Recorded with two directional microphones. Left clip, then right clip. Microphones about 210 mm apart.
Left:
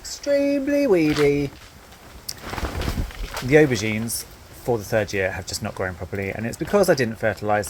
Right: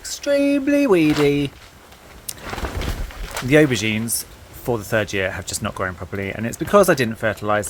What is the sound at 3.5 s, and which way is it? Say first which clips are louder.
Speech: right 1 dB; 15° right (ahead or behind).